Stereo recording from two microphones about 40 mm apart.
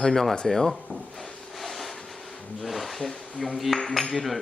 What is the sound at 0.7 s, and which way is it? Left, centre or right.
Speech, centre.